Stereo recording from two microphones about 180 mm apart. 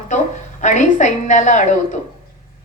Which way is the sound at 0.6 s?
45° left (ahead or behind).